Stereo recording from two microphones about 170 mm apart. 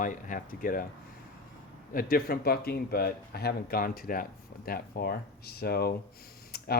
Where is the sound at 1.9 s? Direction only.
55° left (ahead or behind).